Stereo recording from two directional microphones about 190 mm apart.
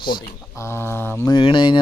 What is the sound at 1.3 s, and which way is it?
Speech, 25° left (ahead or behind).